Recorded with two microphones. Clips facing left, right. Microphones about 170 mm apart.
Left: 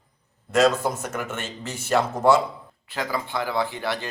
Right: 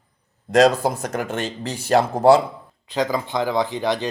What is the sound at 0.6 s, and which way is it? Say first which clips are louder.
Speech: right 4 dB; 35° right (ahead or behind).